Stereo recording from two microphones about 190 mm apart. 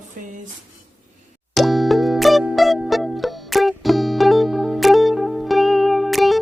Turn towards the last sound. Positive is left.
turn(degrees=0)  # may be behind; listen again after turning